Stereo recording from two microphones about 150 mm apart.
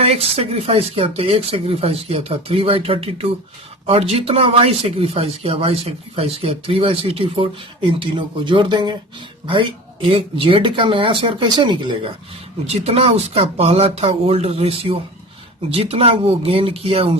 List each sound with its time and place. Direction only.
0.0 s speech: 40° right (ahead or behind)
12.6 s speech: 45° right (ahead or behind)